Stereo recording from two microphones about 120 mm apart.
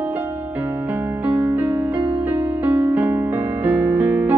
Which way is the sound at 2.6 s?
15° right (ahead or behind).